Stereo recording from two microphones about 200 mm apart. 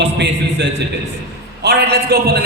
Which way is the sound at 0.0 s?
60° right (ahead or behind).